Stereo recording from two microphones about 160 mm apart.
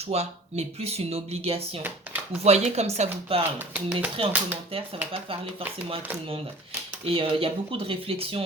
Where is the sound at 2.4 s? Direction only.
40° right (ahead or behind).